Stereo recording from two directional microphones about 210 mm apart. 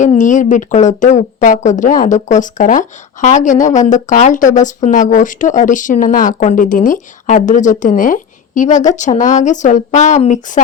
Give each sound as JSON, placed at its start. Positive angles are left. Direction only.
{"t": 0.0, "sound": "a woman's voice", "side_deg": 35}